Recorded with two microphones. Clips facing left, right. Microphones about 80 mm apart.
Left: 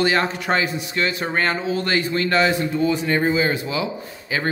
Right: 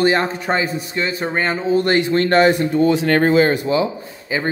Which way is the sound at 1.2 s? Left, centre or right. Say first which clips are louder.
Right 3 dB; centre.